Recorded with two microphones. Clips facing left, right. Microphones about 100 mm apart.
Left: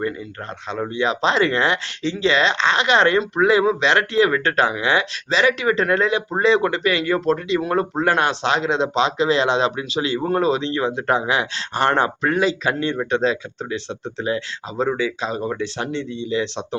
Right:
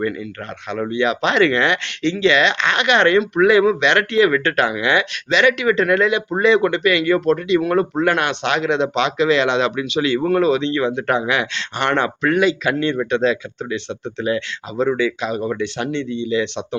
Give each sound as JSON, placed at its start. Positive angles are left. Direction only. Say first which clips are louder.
{"t": 0.7, "sound": "speech", "louder": "right 3 dB", "side_deg": 30}